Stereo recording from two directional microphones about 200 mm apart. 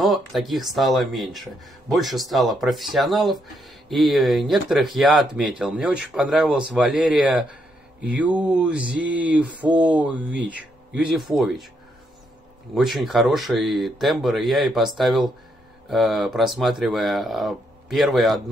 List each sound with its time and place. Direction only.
0.3 s speech: centre (ahead or behind)
8.0 s mantra: 5° right (ahead or behind)
11.1 s speech: centre (ahead or behind)
12.7 s speech: centre (ahead or behind)